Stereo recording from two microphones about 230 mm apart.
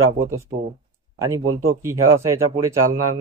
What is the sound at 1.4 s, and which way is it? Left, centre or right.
Speech, right.